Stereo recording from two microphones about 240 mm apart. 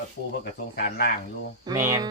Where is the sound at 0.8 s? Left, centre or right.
Left.